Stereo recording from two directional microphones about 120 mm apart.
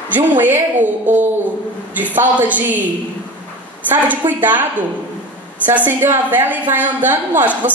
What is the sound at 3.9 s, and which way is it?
Speech, 15° right (ahead or behind).